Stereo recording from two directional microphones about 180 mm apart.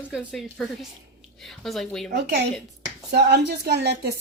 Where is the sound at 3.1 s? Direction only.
65° right (ahead or behind).